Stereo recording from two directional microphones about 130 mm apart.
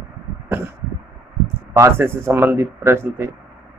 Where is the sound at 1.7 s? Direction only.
20° right (ahead or behind).